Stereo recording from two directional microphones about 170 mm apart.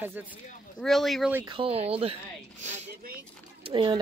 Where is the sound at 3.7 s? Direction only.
30° right (ahead or behind).